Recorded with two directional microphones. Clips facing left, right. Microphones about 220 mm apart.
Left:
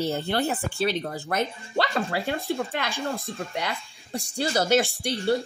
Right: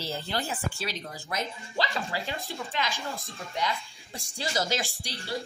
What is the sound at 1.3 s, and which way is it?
Speech, 60° left (ahead or behind).